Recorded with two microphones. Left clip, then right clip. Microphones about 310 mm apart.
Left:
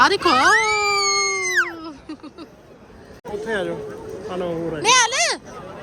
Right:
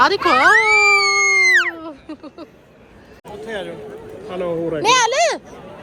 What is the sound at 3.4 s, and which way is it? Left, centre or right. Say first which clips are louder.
Speech: left 3 dB; left.